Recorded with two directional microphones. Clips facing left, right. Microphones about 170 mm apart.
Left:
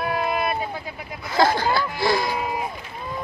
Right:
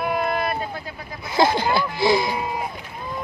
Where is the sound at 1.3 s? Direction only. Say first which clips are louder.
Right 1 dB; 20° right (ahead or behind).